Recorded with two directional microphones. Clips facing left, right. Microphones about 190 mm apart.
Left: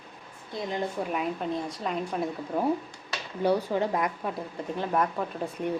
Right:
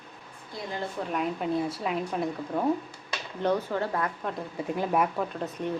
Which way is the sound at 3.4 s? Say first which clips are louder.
Left 2 dB; 10° left (ahead or behind).